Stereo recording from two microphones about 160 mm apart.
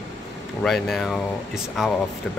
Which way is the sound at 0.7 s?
Centre (ahead or behind).